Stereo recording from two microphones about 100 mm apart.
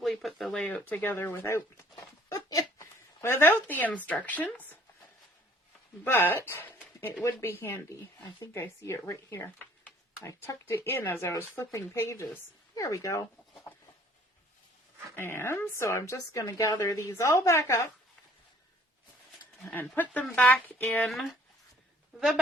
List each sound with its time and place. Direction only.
0.0 s a sound: centre (ahead or behind)
0.6 s a woman's voice: 15° left (ahead or behind)
6.1 s a woman's voice: 20° left (ahead or behind)
7.0 s a woman's voice: 30° left (ahead or behind)
15.1 s a woman's voice: 25° left (ahead or behind)
19.6 s a woman's voice: 20° left (ahead or behind)
21.1 s speech: centre (ahead or behind)